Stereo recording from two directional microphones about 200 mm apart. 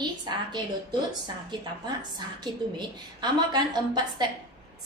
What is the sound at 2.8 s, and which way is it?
A woman's voice, 20° right (ahead or behind).